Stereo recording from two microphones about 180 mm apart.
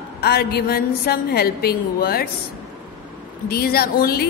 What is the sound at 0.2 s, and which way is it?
A woman's voice, 60° left (ahead or behind).